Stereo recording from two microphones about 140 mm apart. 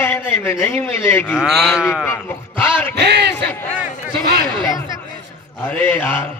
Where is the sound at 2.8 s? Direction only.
15° left (ahead or behind).